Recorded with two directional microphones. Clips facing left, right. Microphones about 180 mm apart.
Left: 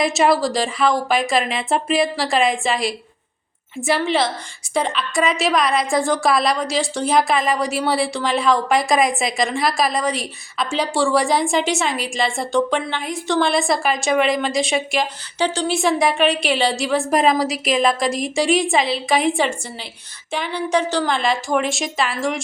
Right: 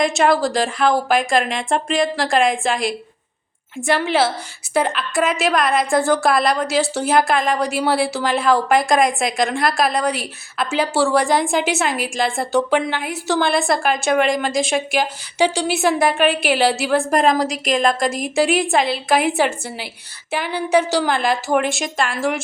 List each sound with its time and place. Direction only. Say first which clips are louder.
0.0 s a woman's voice: even; centre (ahead or behind)